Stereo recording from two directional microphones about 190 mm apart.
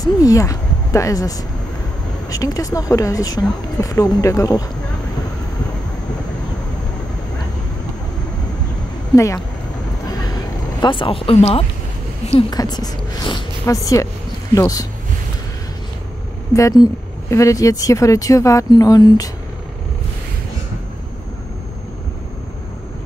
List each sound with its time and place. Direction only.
0.0 s speech: 20° left (ahead or behind)
9.1 s speech: 15° left (ahead or behind)
10.1 s vehicle: 20° left (ahead or behind)
12.3 s speech: 25° left (ahead or behind)
16.5 s speech: 15° left (ahead or behind)